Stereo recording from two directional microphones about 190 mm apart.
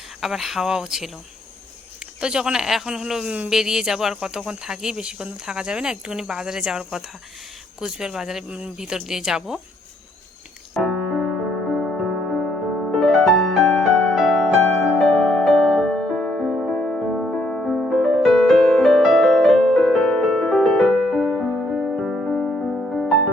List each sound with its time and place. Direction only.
0.2 s speech: centre (ahead or behind)
2.2 s speech: 5° right (ahead or behind)
10.8 s music: centre (ahead or behind)